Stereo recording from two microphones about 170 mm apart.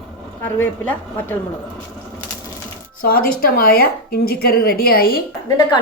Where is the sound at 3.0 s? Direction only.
60° left (ahead or behind).